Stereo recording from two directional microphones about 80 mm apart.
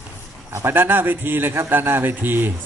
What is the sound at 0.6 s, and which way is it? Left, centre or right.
A man's voice, right.